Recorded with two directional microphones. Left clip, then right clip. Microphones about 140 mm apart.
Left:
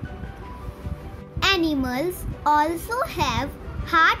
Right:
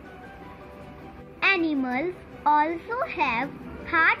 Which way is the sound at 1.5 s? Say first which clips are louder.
Left 2 dB; 35° left (ahead or behind).